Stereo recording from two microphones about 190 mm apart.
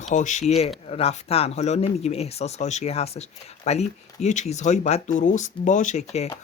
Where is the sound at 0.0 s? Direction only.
40° left (ahead or behind).